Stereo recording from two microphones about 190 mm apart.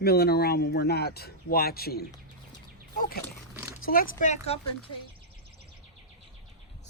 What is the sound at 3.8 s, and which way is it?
Speech, 50° left (ahead or behind).